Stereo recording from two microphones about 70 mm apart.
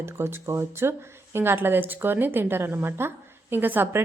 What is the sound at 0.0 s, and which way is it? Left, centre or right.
A woman's voice, right.